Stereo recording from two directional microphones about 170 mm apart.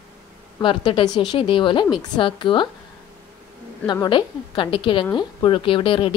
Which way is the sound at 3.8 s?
25° left (ahead or behind).